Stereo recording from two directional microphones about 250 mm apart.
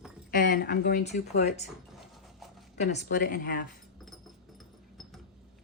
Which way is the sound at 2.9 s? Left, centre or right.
Left.